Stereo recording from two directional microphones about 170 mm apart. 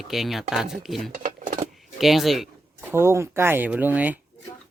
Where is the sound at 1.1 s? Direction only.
55° right (ahead or behind).